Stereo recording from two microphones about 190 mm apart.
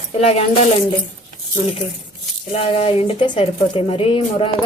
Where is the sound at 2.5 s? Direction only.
30° left (ahead or behind).